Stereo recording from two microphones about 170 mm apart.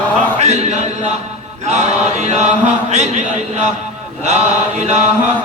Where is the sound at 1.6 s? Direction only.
40° right (ahead or behind).